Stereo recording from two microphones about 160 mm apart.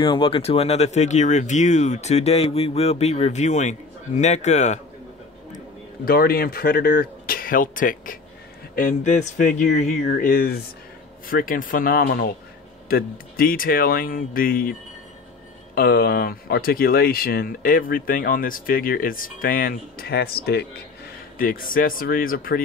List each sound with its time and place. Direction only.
0.0 s speech: 30° left (ahead or behind)
6.0 s speech: 70° left (ahead or behind)
21.4 s speech: 60° left (ahead or behind)